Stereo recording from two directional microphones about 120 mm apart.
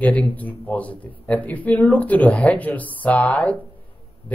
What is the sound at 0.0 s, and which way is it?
A man's voice, 15° left (ahead or behind).